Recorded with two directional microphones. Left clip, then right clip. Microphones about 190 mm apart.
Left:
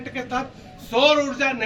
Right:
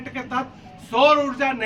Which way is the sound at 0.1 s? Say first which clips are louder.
Even; centre (ahead or behind).